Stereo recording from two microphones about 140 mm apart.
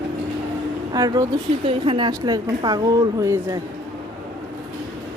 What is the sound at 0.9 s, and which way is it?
A woman's voice, 25° right (ahead or behind).